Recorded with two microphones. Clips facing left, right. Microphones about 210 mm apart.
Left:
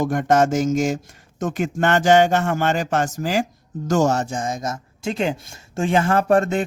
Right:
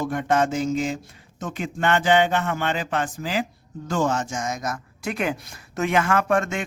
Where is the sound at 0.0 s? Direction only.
45° left (ahead or behind).